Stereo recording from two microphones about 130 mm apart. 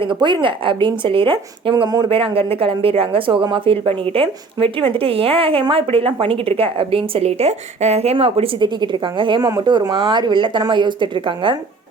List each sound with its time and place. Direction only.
0.0 s speech: 35° right (ahead or behind)
2.0 s a woman's voice: 45° right (ahead or behind)
8.5 s speech: 35° right (ahead or behind)